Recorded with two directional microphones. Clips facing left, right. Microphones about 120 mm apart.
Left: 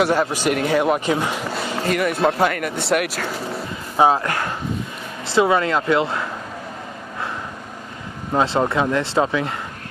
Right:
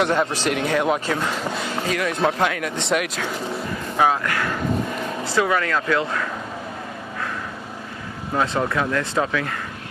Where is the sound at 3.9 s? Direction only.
30° left (ahead or behind).